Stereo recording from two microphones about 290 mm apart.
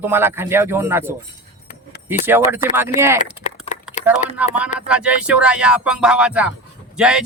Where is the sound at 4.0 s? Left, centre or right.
Left.